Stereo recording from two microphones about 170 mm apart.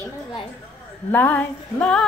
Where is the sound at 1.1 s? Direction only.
10° left (ahead or behind).